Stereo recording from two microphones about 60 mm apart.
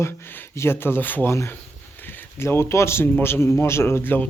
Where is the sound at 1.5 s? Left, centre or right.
Left.